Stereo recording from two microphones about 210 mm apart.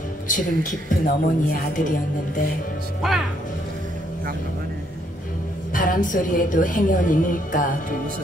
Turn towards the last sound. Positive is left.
turn(degrees=40)  # may be behind; listen again after turning